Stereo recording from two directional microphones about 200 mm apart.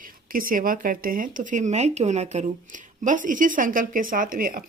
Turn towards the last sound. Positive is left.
turn(degrees=-45)  # may be behind; listen again after turning